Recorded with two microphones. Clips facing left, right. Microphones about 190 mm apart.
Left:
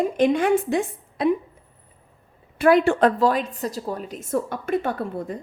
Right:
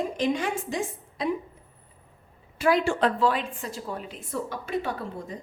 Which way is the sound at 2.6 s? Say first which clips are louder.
Left 6 dB; 55° left (ahead or behind).